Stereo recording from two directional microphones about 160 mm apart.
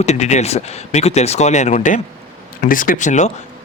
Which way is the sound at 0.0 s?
45° left (ahead or behind).